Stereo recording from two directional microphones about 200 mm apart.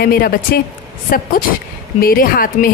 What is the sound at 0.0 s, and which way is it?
Speech, 50° left (ahead or behind).